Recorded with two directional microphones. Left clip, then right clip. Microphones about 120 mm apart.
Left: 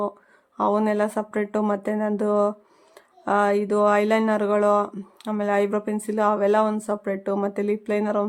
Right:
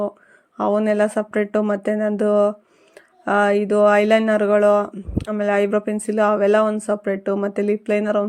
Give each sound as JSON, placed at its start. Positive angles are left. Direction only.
{"t": 0.5, "sound": "speech", "side_deg": -20}